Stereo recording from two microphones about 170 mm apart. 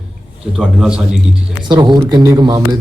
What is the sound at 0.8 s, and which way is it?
Speech, 5° right (ahead or behind).